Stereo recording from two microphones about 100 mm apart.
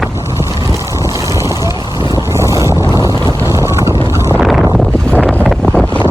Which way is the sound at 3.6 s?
25° right (ahead or behind).